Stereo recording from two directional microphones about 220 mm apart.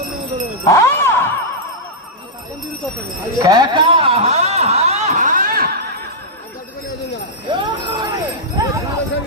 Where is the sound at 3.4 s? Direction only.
20° right (ahead or behind); by 5.7 s 40° right (ahead or behind).